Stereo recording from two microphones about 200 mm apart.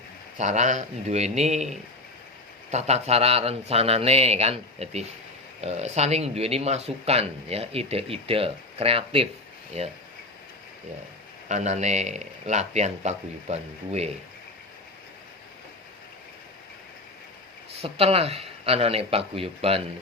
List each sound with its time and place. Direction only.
0.3 s speech: 35° right (ahead or behind)
11.4 s speech: 35° right (ahead or behind)
17.7 s speech: 30° right (ahead or behind)